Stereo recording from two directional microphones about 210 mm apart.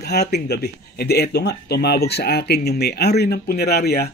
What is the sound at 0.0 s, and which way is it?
Speech, 50° left (ahead or behind).